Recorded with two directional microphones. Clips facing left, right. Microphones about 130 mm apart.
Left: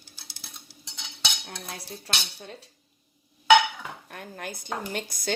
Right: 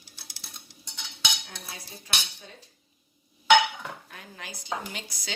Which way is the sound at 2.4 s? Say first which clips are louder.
Left 6 dB; 85° left.